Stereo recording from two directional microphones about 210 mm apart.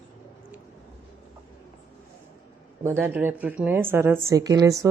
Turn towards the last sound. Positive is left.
turn(degrees=-15)  # may be behind; listen again after turning